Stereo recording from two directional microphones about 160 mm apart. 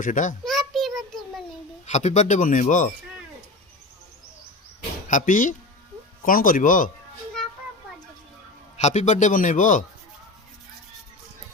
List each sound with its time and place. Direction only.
0.0 s speech: 55° left (ahead or behind)
0.4 s a sound: centre (ahead or behind)
1.9 s speech: 45° left (ahead or behind)
5.0 s speech: 55° left (ahead or behind)
8.8 s speech: 45° left (ahead or behind)